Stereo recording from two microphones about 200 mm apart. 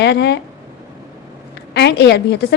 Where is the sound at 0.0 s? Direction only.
60° left (ahead or behind).